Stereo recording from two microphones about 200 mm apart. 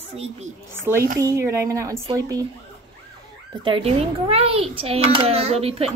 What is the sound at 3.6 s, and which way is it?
A child's voice, 25° right (ahead or behind).